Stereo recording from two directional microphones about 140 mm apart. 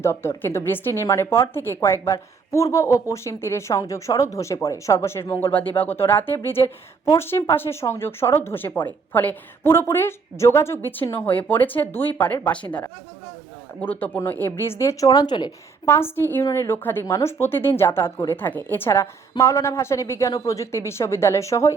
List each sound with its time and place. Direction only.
0.0 s a woman's voice: 15° left (ahead or behind)
13.8 s speech: 15° left (ahead or behind); by 15.5 s 30° left (ahead or behind)
15.9 s a woman's voice: 15° left (ahead or behind)